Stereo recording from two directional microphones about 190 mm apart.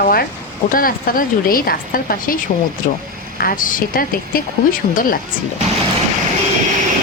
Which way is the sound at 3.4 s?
50° left (ahead or behind).